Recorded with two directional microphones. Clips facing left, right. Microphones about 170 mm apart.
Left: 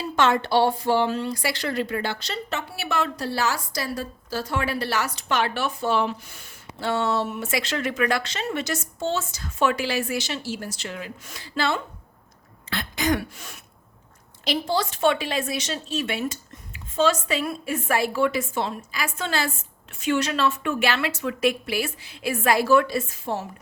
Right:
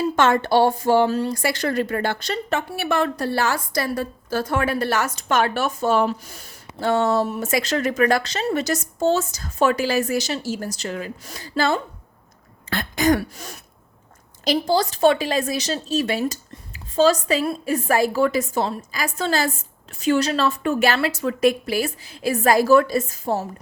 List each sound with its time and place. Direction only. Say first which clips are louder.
0.0 s a woman's voice: right 3 dB; 50° right (ahead or behind)